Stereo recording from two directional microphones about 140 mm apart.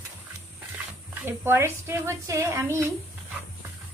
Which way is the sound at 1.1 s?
15° right (ahead or behind).